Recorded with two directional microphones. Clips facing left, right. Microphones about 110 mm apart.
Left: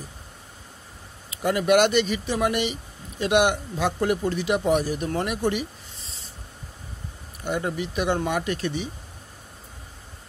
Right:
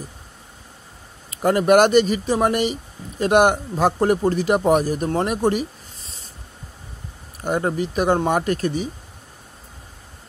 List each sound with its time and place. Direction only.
1.3 s speech: 45° right (ahead or behind)
7.4 s speech: 45° right (ahead or behind)